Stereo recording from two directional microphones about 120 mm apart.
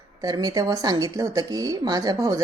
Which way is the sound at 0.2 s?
30° right (ahead or behind).